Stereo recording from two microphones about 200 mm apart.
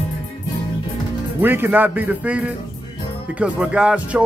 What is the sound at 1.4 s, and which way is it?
Music, 10° right (ahead or behind).